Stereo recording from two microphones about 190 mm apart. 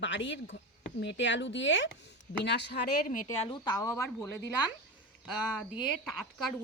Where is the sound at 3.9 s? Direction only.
10° left (ahead or behind).